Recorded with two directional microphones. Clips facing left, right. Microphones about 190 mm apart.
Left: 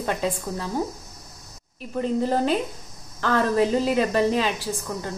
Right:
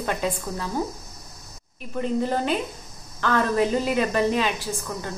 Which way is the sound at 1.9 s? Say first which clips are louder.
Left 1 dB; 35° left (ahead or behind).